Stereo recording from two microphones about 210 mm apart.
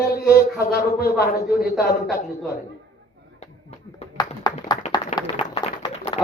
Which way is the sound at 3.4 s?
30° left (ahead or behind).